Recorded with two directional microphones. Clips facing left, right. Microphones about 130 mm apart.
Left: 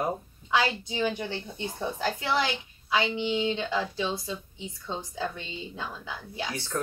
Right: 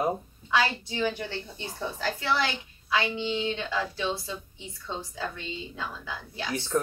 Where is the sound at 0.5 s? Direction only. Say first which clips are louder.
Even; 15° left (ahead or behind).